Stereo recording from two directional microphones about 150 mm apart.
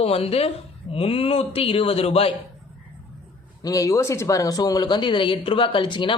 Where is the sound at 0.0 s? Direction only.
40° left (ahead or behind).